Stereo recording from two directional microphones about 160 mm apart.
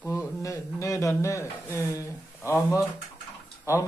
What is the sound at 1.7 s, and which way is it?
Speech, 20° left (ahead or behind).